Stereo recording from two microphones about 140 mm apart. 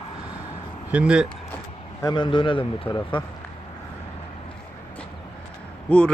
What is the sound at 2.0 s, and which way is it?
A man's voice, 35° left (ahead or behind).